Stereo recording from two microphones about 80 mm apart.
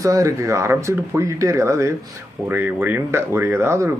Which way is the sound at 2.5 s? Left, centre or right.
Right.